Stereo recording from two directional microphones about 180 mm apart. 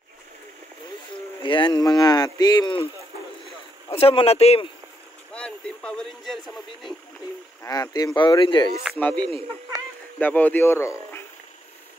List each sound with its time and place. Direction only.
1.4 s speech: 25° left (ahead or behind)
3.9 s speech: 30° left (ahead or behind)
5.3 s speech: 5° left (ahead or behind)
7.6 s speech: 20° left (ahead or behind)
8.9 s speech: 10° left (ahead or behind)
9.2 s speech: 25° right (ahead or behind)
10.1 s speech: 10° left (ahead or behind)